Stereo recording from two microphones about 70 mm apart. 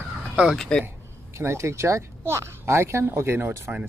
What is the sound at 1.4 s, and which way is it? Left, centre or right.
Speech, right.